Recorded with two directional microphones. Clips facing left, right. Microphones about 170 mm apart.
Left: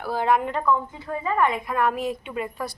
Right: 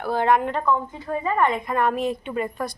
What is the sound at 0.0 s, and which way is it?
A woman's voice, 5° left (ahead or behind).